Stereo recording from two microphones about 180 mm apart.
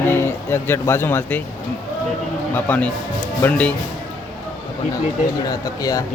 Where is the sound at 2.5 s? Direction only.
10° left (ahead or behind).